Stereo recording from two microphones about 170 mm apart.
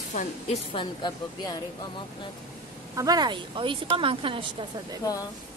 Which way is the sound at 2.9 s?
20° right (ahead or behind).